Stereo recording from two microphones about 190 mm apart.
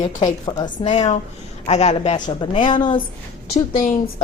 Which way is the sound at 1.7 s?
35° left (ahead or behind).